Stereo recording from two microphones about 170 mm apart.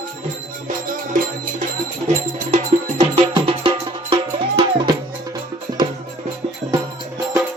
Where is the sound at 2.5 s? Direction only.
35° right (ahead or behind).